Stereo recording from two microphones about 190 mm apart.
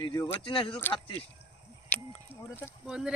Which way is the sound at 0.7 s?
10° left (ahead or behind).